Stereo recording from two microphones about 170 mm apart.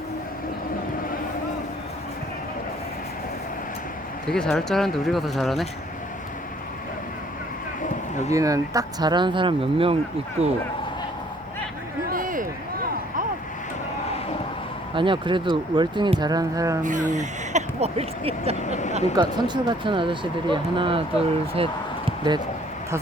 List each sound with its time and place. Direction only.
4.3 s speech: 5° left (ahead or behind)
8.3 s speech: 20° right (ahead or behind); by 10.5 s 40° right (ahead or behind)
12.0 s a sound: 55° right (ahead or behind)
14.9 s speech: 30° right (ahead or behind)
16.8 s speech: 45° right (ahead or behind)
18.6 s speech: 45° left (ahead or behind)
19.1 s speech: 25° right (ahead or behind)
21.5 s basketball bounce: 30° right (ahead or behind)